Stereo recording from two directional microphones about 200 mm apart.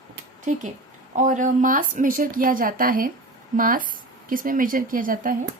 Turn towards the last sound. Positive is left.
turn(degrees=-45)  # may be behind; listen again after turning